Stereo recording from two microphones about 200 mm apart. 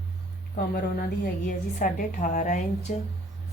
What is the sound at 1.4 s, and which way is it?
A woman's voice, 40° left (ahead or behind).